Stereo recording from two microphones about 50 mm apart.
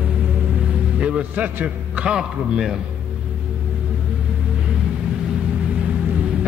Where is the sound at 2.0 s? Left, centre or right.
Centre.